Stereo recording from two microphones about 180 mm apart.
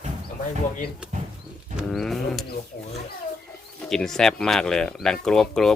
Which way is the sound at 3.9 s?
Centre (ahead or behind).